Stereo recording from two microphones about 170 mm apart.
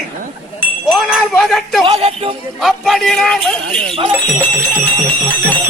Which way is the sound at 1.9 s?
35° right (ahead or behind).